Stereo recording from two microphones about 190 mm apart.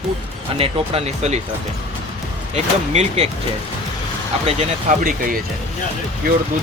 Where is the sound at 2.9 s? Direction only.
35° right (ahead or behind).